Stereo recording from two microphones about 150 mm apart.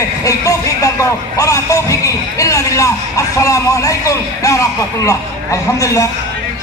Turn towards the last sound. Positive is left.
turn(degrees=20)  # may be behind; listen again after turning